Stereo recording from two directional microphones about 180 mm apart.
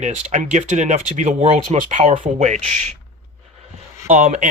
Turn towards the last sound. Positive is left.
turn(degrees=-40)  # may be behind; listen again after turning